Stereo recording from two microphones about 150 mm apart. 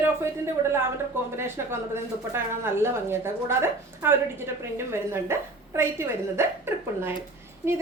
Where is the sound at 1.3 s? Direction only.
15° right (ahead or behind).